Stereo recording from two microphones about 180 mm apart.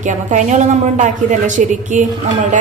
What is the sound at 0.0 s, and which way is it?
Speech, 40° right (ahead or behind).